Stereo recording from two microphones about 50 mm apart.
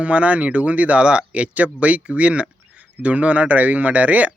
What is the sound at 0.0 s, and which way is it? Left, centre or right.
Speech, right.